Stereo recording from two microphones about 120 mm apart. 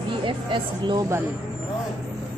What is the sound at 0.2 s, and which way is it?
Speech, 45° right (ahead or behind).